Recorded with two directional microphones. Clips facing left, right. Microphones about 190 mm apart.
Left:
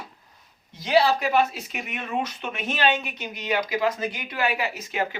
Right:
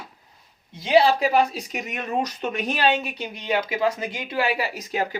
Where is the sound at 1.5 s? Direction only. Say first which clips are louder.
Right 3 dB; 40° right (ahead or behind).